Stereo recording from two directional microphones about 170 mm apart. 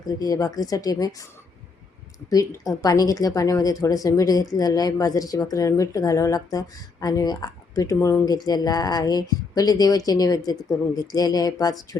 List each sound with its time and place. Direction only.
0.1 s speech: 20° left (ahead or behind)
2.3 s speech: 20° left (ahead or behind)